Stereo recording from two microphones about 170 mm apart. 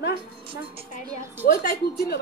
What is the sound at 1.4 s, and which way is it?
Speech, 60° left (ahead or behind).